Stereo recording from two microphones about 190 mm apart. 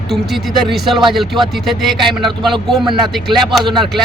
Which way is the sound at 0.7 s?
Centre (ahead or behind).